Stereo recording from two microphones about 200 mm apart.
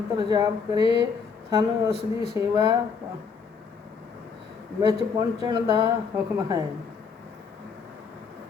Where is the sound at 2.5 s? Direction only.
20° right (ahead or behind).